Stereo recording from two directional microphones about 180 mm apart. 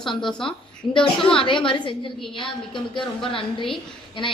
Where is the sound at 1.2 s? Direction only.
30° left (ahead or behind).